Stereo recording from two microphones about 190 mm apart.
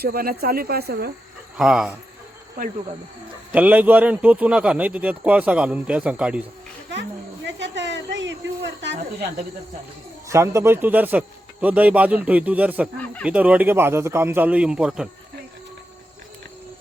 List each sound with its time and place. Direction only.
0.0 s speech: 50° right (ahead or behind)
1.5 s speech: 5° right (ahead or behind)
3.5 s a man's voice: 10° right (ahead or behind)
7.4 s speech: 70° right (ahead or behind)
10.2 s a man's voice: 15° right (ahead or behind)